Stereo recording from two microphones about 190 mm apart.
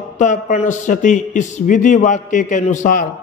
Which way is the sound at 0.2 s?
40° left (ahead or behind).